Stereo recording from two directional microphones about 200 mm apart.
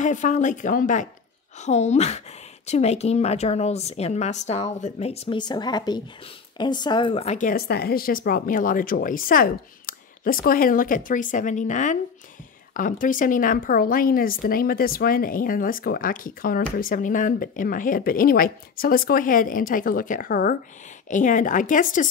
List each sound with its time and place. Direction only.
0.0 s a woman's voice: 40° left (ahead or behind)